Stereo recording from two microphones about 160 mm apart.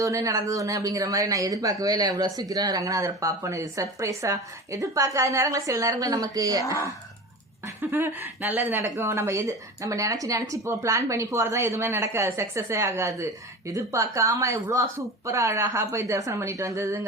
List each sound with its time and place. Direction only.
0.0 s speech: 20° right (ahead or behind)